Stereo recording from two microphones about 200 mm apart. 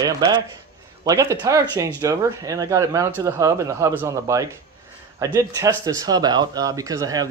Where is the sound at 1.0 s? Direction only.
15° right (ahead or behind).